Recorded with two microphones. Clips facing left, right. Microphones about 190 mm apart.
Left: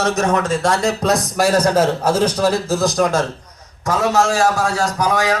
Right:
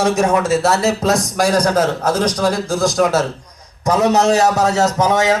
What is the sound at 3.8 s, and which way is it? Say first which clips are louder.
A man's voice: right 3 dB; 20° right (ahead or behind).